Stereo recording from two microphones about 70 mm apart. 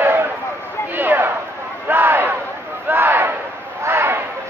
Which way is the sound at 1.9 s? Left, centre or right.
Right.